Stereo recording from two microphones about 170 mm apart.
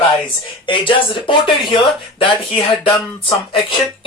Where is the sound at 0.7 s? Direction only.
30° left (ahead or behind).